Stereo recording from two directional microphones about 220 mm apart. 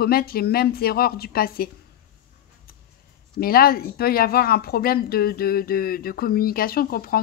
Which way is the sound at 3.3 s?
45° left (ahead or behind).